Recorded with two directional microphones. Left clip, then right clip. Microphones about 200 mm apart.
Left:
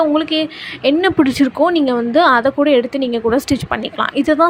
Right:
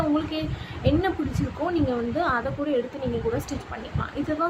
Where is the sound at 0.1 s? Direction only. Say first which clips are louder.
Left 10 dB; 50° left (ahead or behind).